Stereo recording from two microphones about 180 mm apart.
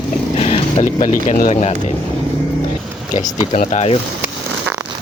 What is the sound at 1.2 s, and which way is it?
Speech, 40° left (ahead or behind).